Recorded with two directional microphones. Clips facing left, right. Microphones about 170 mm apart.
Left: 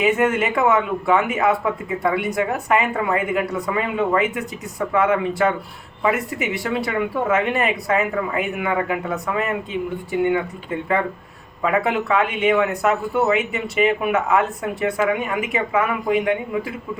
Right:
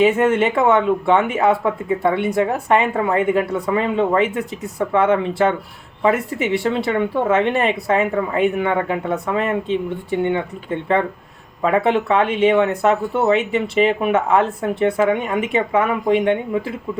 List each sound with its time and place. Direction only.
0.0 s speech: 30° right (ahead or behind)